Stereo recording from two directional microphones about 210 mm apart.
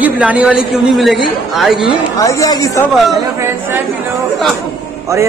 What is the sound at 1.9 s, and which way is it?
Speech, 15° left (ahead or behind).